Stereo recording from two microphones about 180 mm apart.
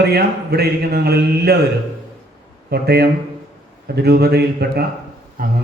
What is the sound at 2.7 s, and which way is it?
A man's voice, 65° right (ahead or behind).